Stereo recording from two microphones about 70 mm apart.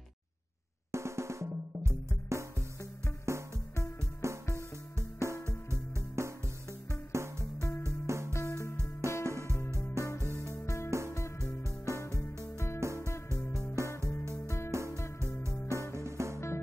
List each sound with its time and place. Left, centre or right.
0.9 s drum: right
3.3 s music: right
8.3 s music: left
9.2 s music: right
10.0 s music: left
10.9 s music: right
11.1 s music: left
11.6 s music: right
12.5 s music: left
13.8 s music: right
16.3 s music: left